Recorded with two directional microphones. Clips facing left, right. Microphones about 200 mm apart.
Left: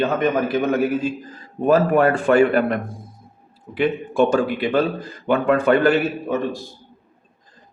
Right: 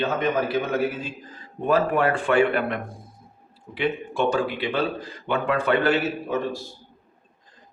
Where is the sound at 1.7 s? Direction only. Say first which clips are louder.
Left 5 dB; 45° left (ahead or behind).